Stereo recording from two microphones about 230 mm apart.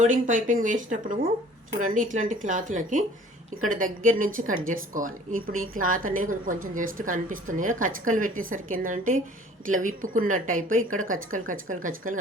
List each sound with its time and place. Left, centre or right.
0.0 s a woman's voice: right